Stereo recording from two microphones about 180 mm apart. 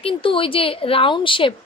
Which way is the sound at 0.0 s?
30° left (ahead or behind).